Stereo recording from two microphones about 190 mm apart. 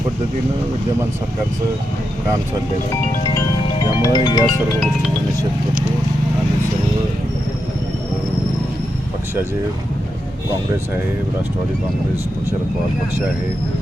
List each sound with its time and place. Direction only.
3.3 s music: 20° left (ahead or behind)